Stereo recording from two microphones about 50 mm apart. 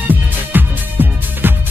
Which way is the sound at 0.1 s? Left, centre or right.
Right.